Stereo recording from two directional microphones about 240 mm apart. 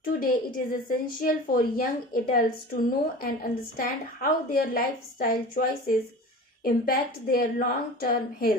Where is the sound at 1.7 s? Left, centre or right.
Left.